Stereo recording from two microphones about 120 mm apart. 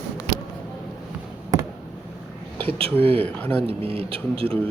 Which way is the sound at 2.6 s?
50° right (ahead or behind).